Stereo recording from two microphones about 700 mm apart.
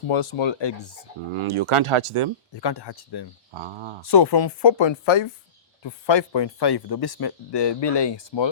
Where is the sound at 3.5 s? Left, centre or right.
Right.